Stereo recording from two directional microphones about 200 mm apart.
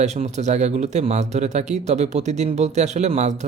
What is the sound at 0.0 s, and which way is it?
Speech, 35° right (ahead or behind).